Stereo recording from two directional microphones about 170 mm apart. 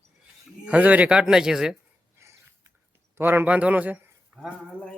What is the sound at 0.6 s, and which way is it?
Speech, 5° right (ahead or behind).